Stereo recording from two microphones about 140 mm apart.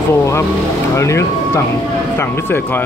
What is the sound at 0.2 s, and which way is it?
Speech, 20° left (ahead or behind).